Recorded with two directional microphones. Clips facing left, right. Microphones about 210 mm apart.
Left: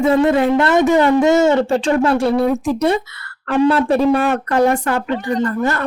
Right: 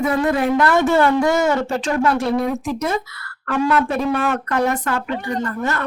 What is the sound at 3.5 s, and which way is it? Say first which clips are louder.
Speech: left 5 dB; 30° left (ahead or behind).